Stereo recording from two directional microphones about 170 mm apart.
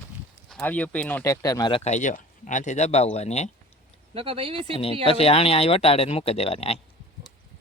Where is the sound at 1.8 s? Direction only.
45° left (ahead or behind).